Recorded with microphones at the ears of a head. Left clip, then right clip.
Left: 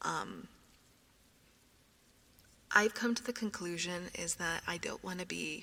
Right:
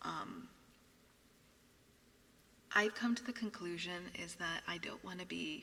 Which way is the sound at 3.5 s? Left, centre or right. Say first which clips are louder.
Left 5 dB; left.